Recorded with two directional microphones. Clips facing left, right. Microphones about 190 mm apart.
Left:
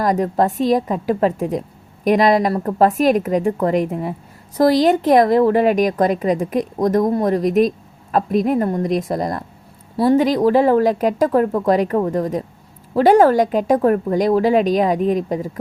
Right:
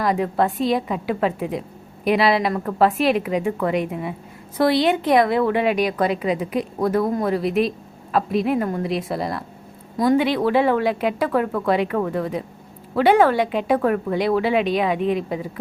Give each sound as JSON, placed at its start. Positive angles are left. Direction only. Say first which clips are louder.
{"t": 0.0, "sound": "a woman's voice", "louder": "left 3 dB", "side_deg": 40}